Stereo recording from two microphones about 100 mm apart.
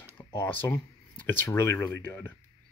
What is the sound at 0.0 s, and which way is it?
Speech, 25° left (ahead or behind).